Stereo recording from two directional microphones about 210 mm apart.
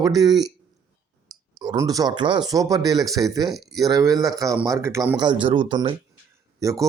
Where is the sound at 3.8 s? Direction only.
15° right (ahead or behind).